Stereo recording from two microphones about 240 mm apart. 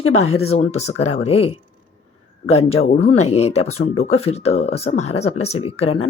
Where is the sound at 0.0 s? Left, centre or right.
Left.